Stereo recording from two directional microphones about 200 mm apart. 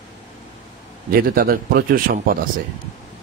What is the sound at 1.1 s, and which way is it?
Speech, 45° right (ahead or behind).